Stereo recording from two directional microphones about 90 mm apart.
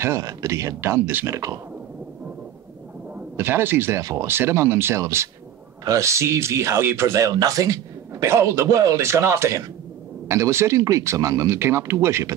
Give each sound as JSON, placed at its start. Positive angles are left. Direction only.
{"t": 0.0, "sound": "speech", "side_deg": -35}
{"t": 1.3, "sound": "speech", "side_deg": -35}
{"t": 3.2, "sound": "speech", "side_deg": -25}
{"t": 4.0, "sound": "speech", "side_deg": -40}
{"t": 4.3, "sound": "speech", "side_deg": -30}